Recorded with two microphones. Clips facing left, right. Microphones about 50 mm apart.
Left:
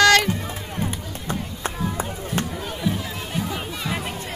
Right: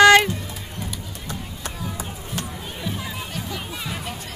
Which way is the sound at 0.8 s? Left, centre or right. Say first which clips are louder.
Left 6 dB; left.